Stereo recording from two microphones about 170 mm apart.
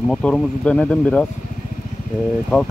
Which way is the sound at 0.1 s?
5° left (ahead or behind).